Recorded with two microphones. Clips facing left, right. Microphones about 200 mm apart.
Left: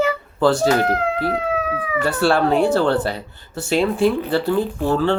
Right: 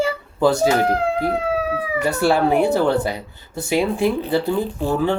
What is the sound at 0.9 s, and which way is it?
Speech, 30° right (ahead or behind).